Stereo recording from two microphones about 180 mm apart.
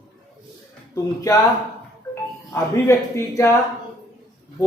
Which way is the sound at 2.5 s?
15° left (ahead or behind).